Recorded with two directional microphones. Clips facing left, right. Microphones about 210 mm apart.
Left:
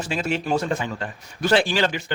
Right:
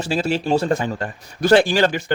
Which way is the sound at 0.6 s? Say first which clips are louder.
Right 5 dB; 40° right (ahead or behind).